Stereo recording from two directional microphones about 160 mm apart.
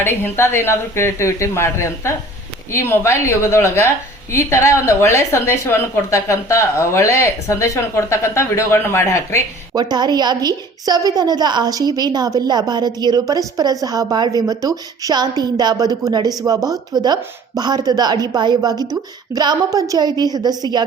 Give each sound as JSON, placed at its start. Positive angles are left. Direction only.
{"t": 0.0, "sound": "a woman's voice", "side_deg": 15}
{"t": 9.7, "sound": "speech", "side_deg": -25}